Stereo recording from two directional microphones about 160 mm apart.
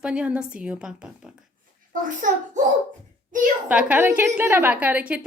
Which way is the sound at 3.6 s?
10° right (ahead or behind).